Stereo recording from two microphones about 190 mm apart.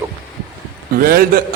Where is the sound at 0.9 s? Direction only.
50° right (ahead or behind).